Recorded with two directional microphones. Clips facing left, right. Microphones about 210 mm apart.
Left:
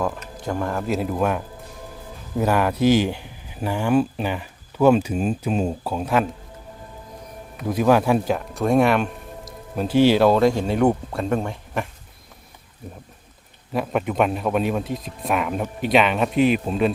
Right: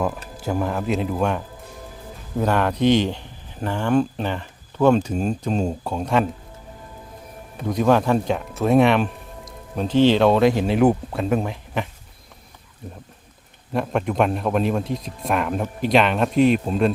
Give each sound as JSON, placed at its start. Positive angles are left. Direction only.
{"t": 0.4, "sound": "speech", "side_deg": -5}
{"t": 7.7, "sound": "speech", "side_deg": 5}
{"t": 13.7, "sound": "speech", "side_deg": 0}